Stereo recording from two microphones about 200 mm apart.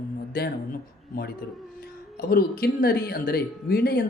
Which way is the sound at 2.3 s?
50° left (ahead or behind).